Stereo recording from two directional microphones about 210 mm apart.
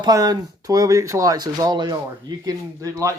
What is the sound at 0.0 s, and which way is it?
Speech, 15° right (ahead or behind).